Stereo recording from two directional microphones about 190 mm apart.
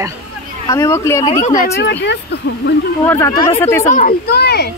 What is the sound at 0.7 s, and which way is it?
Speech, 15° left (ahead or behind).